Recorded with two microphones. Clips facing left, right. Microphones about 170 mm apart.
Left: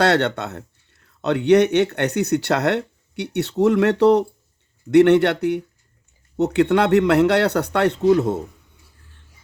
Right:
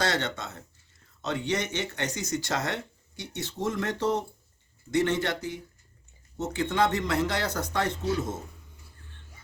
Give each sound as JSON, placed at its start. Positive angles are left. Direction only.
{"t": 0.0, "sound": "speech", "side_deg": 65}